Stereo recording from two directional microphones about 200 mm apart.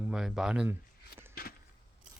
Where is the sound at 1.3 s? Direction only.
50° left (ahead or behind).